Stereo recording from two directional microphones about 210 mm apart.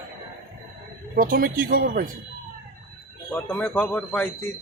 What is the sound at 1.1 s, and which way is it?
Speech, 40° right (ahead or behind).